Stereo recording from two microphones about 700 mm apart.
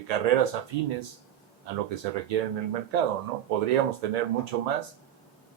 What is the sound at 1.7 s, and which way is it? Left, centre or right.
Speech, right.